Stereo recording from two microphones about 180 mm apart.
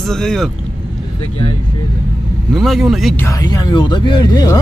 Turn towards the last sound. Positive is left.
turn(degrees=20)  # may be behind; listen again after turning